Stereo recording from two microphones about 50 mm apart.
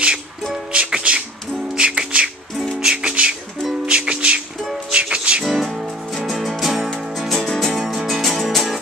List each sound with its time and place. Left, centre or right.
0.0 s music: centre
5.5 s music: centre
7.7 s music: centre